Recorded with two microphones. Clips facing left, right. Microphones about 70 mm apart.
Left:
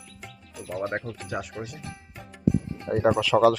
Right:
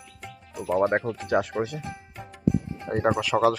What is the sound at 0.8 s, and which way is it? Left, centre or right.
Speech, right.